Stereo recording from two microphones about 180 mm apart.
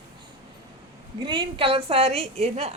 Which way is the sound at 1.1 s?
30° right (ahead or behind).